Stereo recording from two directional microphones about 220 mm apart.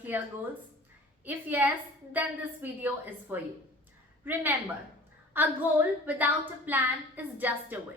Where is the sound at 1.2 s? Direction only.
10° right (ahead or behind).